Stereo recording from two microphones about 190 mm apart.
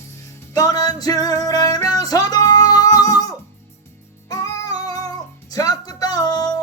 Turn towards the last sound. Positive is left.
turn(degrees=20)  # may be behind; listen again after turning